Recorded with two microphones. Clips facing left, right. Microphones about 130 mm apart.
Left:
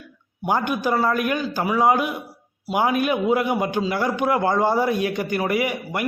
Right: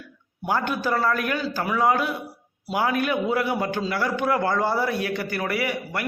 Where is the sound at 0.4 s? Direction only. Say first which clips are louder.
Left 3 dB; 15° left (ahead or behind).